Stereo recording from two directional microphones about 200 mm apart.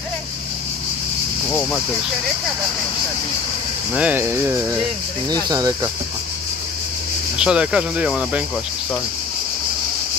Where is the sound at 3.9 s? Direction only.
10° right (ahead or behind).